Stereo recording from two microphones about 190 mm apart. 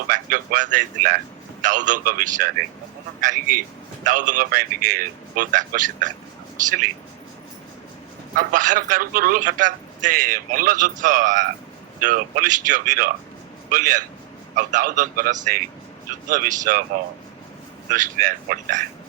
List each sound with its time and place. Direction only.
0.1 s a man's voice: 45° right (ahead or behind)
8.4 s a man's voice: 45° right (ahead or behind)
17.9 s a man's voice: 45° right (ahead or behind)